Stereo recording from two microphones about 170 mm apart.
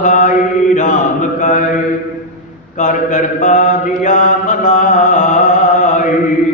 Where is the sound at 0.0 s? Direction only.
50° left (ahead or behind).